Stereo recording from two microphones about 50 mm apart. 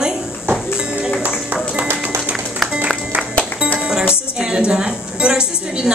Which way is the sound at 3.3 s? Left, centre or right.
Left.